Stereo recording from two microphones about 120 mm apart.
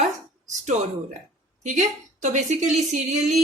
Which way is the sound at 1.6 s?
90° right.